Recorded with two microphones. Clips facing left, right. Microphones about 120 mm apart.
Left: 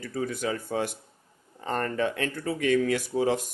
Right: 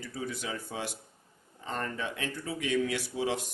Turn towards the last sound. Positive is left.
turn(degrees=45)  # may be behind; listen again after turning